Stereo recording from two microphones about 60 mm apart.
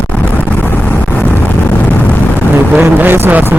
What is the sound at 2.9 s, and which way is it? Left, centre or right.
Speech, right.